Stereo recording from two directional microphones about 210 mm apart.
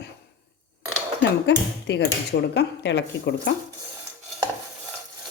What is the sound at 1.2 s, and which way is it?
Speech, 55° left (ahead or behind).